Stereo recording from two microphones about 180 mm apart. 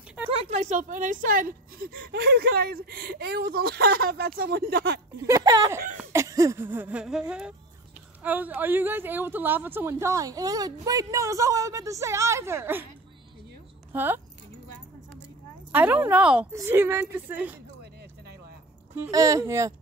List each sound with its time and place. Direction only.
0.3 s speech: 35° right (ahead or behind); by 5.0 s 65° right (ahead or behind)
5.2 s speech: 20° right (ahead or behind)
5.9 s a sound: 15° right (ahead or behind)
8.2 s speech: 10° right (ahead or behind)
13.9 s speech: 10° right (ahead or behind)
15.7 s speech: 10° right (ahead or behind)
18.9 s speech: 20° right (ahead or behind)